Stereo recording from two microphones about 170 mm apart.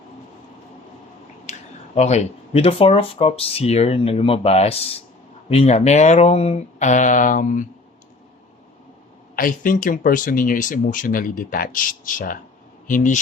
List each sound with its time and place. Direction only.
1.5 s a sound: 45° left (ahead or behind)
2.0 s speech: 40° left (ahead or behind)
9.3 s speech: 55° left (ahead or behind)